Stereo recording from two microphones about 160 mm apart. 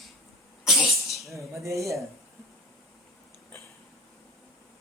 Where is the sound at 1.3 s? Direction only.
20° right (ahead or behind).